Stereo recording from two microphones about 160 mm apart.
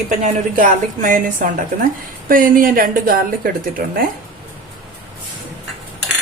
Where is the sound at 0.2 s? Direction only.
55° right (ahead or behind).